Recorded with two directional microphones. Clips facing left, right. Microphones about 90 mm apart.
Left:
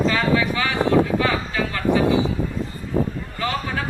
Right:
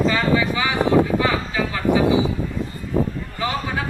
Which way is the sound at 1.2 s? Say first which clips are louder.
Right 1 dB; 15° right (ahead or behind).